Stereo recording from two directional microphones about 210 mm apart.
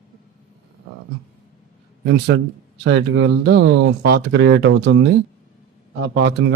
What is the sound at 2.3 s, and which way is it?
Speech, 55° right (ahead or behind).